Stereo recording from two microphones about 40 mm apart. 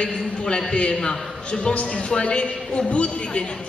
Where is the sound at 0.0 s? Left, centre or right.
Left.